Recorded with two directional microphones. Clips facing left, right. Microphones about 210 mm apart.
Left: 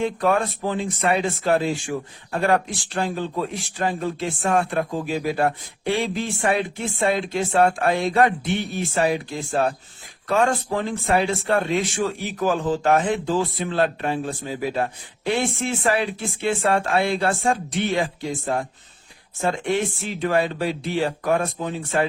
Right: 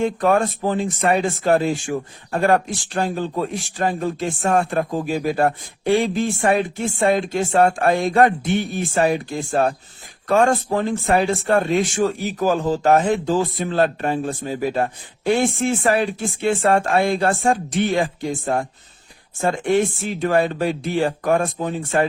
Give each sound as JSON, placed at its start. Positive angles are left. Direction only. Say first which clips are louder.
{"t": 0.0, "sound": "speech", "louder": "right 3 dB", "side_deg": -45}